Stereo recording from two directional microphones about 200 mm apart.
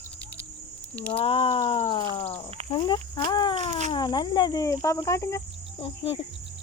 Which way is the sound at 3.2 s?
25° left (ahead or behind).